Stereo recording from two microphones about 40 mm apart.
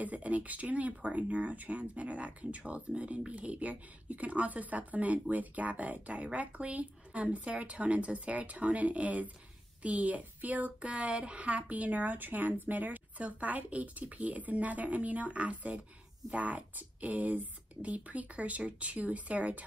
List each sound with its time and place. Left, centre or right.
0.0 s speech: right